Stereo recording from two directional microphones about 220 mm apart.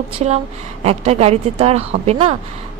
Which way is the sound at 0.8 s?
30° right (ahead or behind).